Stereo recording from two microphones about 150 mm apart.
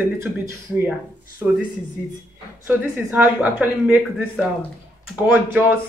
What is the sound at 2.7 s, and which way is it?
Speech, 10° right (ahead or behind).